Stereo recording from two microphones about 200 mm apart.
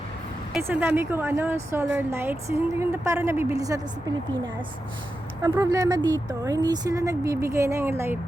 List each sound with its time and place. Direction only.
0.5 s a woman's voice: 10° right (ahead or behind)
5.4 s a woman's voice: 20° right (ahead or behind)